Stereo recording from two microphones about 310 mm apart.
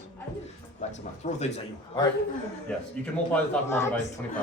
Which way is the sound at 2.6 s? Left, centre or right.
Centre.